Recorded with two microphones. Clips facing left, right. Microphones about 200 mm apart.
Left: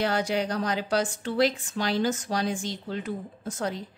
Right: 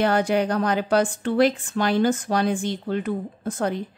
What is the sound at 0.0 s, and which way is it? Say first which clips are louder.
A woman's voice: right 6 dB; 55° right (ahead or behind).